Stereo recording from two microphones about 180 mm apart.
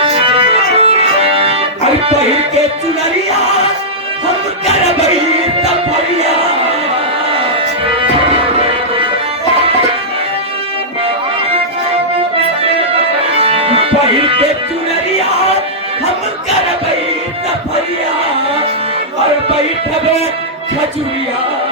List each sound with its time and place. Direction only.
0.0 s music: 30° right (ahead or behind)
13.3 s music: 30° right (ahead or behind)